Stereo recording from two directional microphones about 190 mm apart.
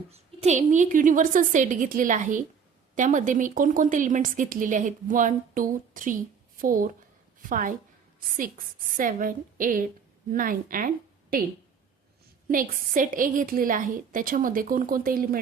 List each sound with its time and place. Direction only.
0.4 s a woman's voice: 40° right (ahead or behind)
12.5 s a woman's voice: 45° right (ahead or behind)